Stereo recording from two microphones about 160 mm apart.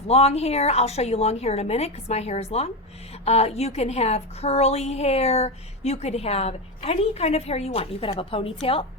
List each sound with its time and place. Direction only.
0.1 s a woman's voice: 40° left (ahead or behind)